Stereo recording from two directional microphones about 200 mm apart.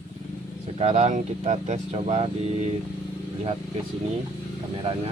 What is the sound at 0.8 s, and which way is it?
Speech, 35° right (ahead or behind).